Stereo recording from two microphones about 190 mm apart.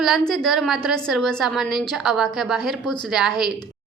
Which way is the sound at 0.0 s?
Centre (ahead or behind).